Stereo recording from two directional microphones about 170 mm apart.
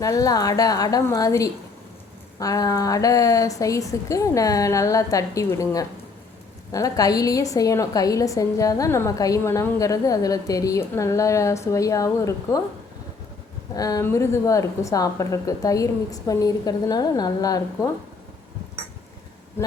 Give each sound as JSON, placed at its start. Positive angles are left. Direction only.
{"t": 0.0, "sound": "a woman's voice", "side_deg": 20}
{"t": 13.7, "sound": "a woman's voice", "side_deg": 20}